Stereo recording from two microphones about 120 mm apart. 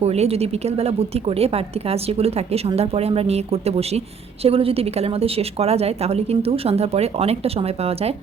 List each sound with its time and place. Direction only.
0.0 s a woman's voice: 60° right (ahead or behind)